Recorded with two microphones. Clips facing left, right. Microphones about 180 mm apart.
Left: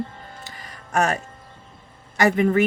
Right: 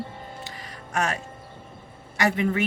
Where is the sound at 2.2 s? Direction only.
50° left (ahead or behind).